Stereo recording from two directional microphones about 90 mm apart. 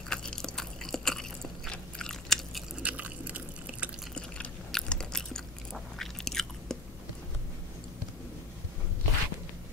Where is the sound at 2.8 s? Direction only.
15° right (ahead or behind).